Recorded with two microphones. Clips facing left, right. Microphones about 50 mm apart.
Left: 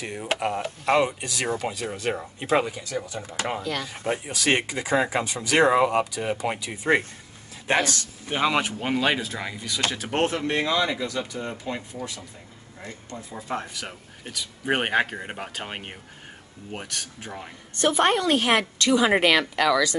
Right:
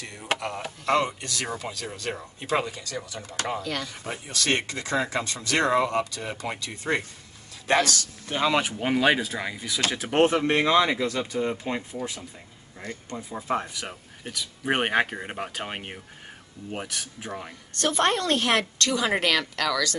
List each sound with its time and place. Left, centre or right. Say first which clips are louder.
0.0 s speech: left 7 dB; left
0.6 s speech: left 2 dB; centre
3.3 s speech: left 1 dB; left
3.6 s speech: left 2 dB; centre
3.9 s speech: left 7 dB; left
4.3 s speech: even; centre
8.7 s speech: right 2 dB; centre
10.3 s speech: right 4 dB; right
11.6 s speech: right 2 dB; right
13.4 s speech: right 3 dB; centre
17.7 s speech: left 3 dB; centre